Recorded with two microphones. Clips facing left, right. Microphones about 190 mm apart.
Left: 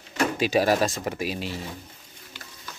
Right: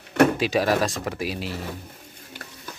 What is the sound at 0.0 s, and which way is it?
Drawer open or close, 60° right (ahead or behind).